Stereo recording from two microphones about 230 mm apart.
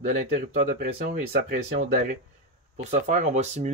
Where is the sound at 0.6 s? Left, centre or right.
Right.